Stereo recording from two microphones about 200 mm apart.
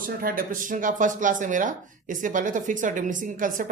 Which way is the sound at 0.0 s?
45° right (ahead or behind).